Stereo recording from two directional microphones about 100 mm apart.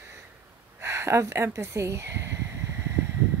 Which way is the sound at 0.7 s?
25° right (ahead or behind).